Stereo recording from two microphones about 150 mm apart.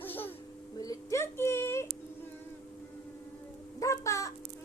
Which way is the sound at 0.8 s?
20° left (ahead or behind).